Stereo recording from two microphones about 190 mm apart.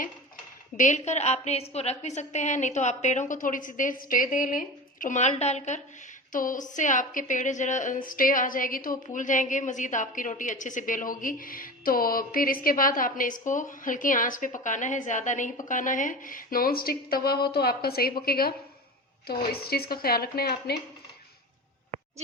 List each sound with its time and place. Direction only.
0.8 s a woman's voice: 40° left (ahead or behind); by 20.7 s 55° left (ahead or behind)